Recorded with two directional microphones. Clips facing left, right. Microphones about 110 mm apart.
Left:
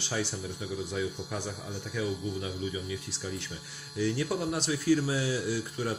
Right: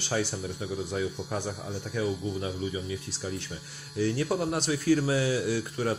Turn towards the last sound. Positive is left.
turn(degrees=-65)  # may be behind; listen again after turning